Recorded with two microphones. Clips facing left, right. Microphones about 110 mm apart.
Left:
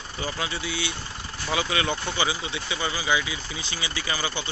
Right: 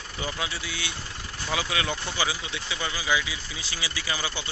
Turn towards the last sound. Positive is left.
turn(degrees=-10)  # may be behind; listen again after turning